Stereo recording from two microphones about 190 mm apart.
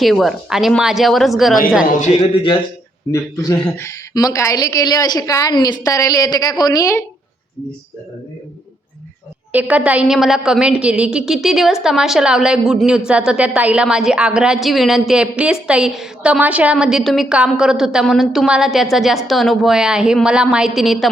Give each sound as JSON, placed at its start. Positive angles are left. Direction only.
{"t": 0.0, "sound": "a woman's voice", "side_deg": 0}
{"t": 1.9, "sound": "a man's voice", "side_deg": 35}
{"t": 3.1, "sound": "a woman's voice", "side_deg": 15}
{"t": 9.5, "sound": "a woman's voice", "side_deg": -10}